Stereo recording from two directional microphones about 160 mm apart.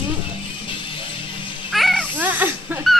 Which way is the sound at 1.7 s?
Centre (ahead or behind).